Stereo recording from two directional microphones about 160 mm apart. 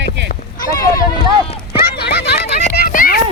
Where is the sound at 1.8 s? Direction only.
90° left.